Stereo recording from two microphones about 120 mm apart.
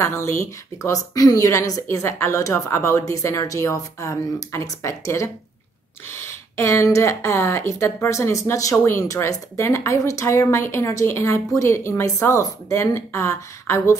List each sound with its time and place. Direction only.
0.0 s a woman's voice: 20° left (ahead or behind)